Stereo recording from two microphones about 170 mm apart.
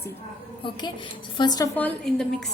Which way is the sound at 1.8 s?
5° left (ahead or behind).